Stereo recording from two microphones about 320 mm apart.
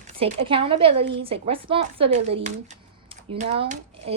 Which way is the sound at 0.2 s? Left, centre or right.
Centre.